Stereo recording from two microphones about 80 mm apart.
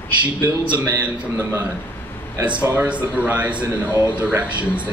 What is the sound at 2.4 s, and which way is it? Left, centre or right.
A man's voice, centre.